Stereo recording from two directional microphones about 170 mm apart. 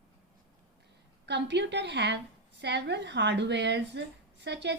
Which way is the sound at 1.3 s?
90° right.